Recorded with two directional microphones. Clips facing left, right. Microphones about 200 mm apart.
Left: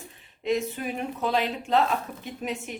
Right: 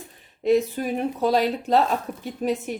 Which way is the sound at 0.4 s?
40° right (ahead or behind).